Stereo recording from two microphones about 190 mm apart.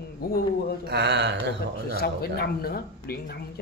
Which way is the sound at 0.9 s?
60° right (ahead or behind).